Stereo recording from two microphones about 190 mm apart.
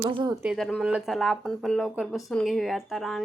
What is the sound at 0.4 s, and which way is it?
Speech, centre (ahead or behind).